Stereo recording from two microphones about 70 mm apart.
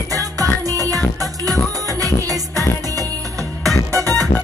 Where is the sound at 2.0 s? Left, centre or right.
Right.